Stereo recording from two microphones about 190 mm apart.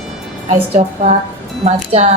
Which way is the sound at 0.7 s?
35° right (ahead or behind).